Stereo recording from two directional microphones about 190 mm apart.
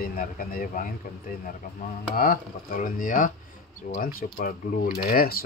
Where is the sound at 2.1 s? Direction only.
50° left (ahead or behind).